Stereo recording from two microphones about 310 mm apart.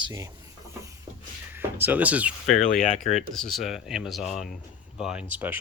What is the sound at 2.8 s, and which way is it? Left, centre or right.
Speech, left.